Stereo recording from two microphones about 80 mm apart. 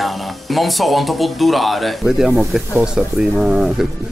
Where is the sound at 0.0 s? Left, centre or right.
Centre.